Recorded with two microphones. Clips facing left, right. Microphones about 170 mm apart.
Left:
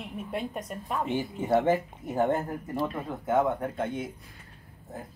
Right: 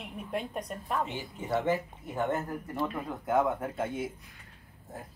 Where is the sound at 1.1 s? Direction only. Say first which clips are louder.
Left 7 dB; 50° left (ahead or behind); by 2.9 s 30° left (ahead or behind).